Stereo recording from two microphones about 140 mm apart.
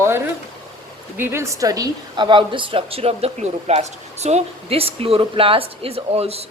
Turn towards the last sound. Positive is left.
turn(degrees=-45)  # may be behind; listen again after turning